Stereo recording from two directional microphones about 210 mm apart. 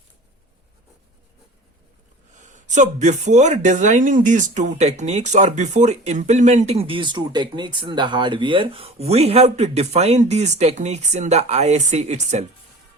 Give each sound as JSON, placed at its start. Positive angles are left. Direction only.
{"t": 2.6, "sound": "speech", "side_deg": -35}